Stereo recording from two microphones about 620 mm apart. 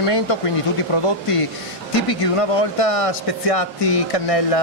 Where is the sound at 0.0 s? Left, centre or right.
Left.